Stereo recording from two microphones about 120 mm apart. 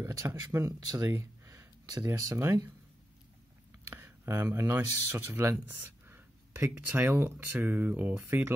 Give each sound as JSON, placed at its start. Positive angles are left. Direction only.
{"t": 0.0, "sound": "speech", "side_deg": -25}
{"t": 3.9, "sound": "a sound", "side_deg": -20}
{"t": 4.6, "sound": "speech", "side_deg": -20}